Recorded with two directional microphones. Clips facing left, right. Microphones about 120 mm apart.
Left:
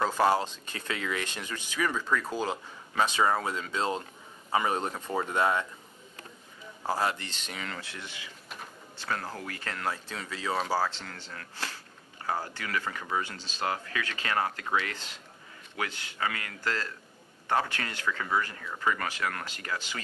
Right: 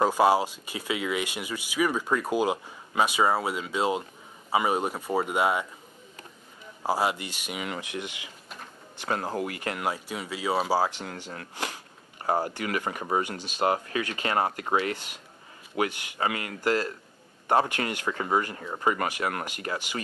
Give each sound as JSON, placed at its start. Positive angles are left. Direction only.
{"t": 0.0, "sound": "speech", "side_deg": -15}
{"t": 6.8, "sound": "speech", "side_deg": -15}
{"t": 12.2, "sound": "speech", "side_deg": -35}
{"t": 12.4, "sound": "speech", "side_deg": -20}
{"t": 14.9, "sound": "a man's voice", "side_deg": -15}
{"t": 18.1, "sound": "speech", "side_deg": -30}